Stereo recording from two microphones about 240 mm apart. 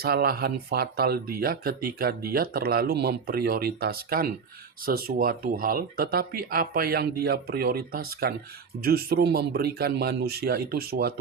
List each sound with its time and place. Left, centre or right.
0.0 s speech: right